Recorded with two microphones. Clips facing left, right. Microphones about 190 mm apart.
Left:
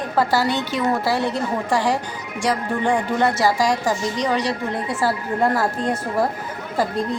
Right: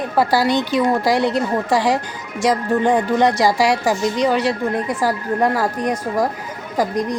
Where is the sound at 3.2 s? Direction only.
15° right (ahead or behind).